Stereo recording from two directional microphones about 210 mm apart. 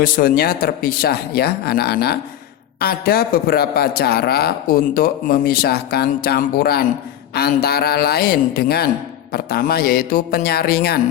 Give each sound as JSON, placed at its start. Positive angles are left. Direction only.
{"t": 0.0, "sound": "speech", "side_deg": 45}